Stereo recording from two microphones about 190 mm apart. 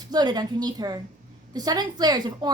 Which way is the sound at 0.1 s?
20° right (ahead or behind).